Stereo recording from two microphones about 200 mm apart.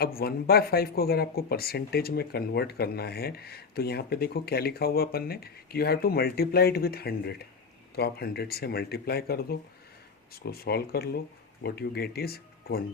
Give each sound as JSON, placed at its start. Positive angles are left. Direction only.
{"t": 0.0, "sound": "speech", "side_deg": 50}